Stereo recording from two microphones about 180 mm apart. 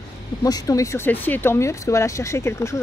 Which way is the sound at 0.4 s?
20° left (ahead or behind).